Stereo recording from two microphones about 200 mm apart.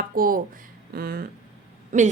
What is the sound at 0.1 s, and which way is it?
A woman's voice, 45° right (ahead or behind).